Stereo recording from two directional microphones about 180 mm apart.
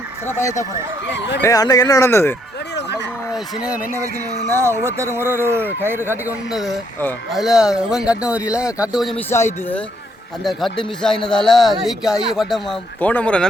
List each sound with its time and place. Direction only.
0.3 s speech: 15° left (ahead or behind)
1.0 s speech: 75° left (ahead or behind)
1.4 s speech: 20° left (ahead or behind)
3.3 s speech: 5° right (ahead or behind)
6.5 s speech: centre (ahead or behind)
9.3 s speech: 10° left (ahead or behind)
10.4 s speech: centre (ahead or behind)